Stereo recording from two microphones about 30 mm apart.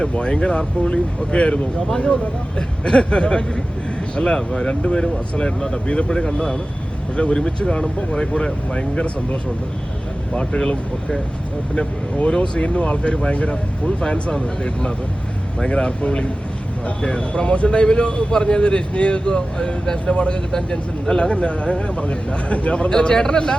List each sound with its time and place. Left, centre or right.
0.1 s a man's voice: left
2.6 s speech: left
4.7 s a man's voice: left
12.3 s a man's voice: left
20.5 s speech: centre
21.3 s a man's voice: left
22.9 s speech: left